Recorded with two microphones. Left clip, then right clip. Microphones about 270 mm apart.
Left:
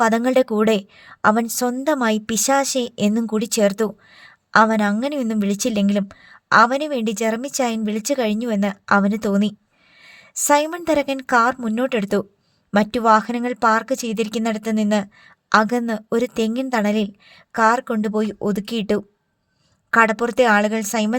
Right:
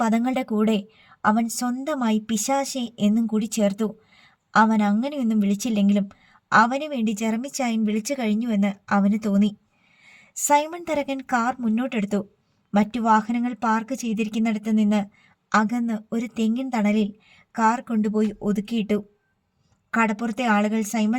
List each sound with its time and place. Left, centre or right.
0.0 s a woman's voice: left
20.1 s a woman's voice: left